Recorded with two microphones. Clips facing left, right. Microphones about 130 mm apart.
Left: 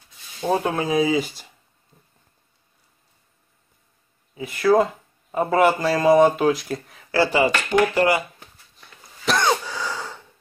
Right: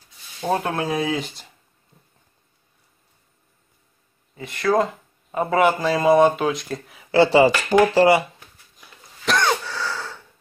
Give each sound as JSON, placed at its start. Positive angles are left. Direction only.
{"t": 0.5, "sound": "a man's voice", "side_deg": 0}
{"t": 4.4, "sound": "a man's voice", "side_deg": 5}
{"t": 7.1, "sound": "speech", "side_deg": -25}
{"t": 8.8, "sound": "throat clearing", "side_deg": 5}
{"t": 9.5, "sound": "a sound", "side_deg": 15}